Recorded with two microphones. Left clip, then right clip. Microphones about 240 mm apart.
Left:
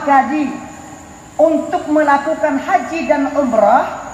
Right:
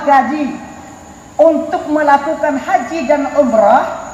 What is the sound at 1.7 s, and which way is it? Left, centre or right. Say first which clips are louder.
A woman's voice: right 2 dB; right.